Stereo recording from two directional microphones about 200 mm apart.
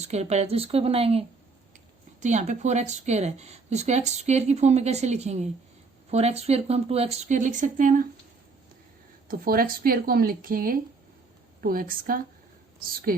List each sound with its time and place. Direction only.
0.0 s speech: 35° right (ahead or behind)
2.2 s speech: 35° right (ahead or behind)
9.3 s speech: 45° right (ahead or behind)